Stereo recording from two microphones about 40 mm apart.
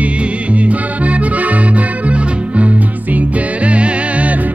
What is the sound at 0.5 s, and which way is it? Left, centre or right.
Accordion, right.